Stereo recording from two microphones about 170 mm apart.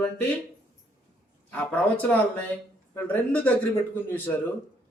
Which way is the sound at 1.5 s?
10° left (ahead or behind).